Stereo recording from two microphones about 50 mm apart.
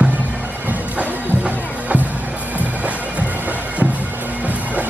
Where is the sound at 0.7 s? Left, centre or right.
Right.